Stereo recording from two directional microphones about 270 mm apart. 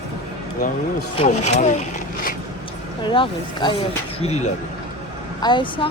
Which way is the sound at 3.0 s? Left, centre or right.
Centre.